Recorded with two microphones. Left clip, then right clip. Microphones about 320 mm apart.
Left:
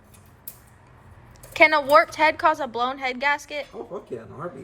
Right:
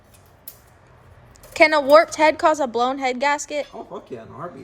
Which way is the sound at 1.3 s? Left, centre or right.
Centre.